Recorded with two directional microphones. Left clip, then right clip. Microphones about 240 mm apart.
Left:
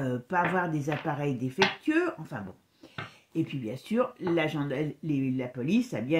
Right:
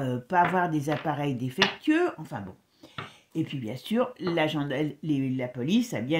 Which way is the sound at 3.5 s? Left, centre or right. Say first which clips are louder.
Right 1 dB; right.